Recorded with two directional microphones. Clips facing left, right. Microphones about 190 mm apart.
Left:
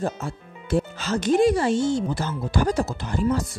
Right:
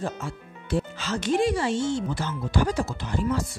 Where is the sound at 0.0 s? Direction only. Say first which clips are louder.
Left 4 dB; 45° left (ahead or behind).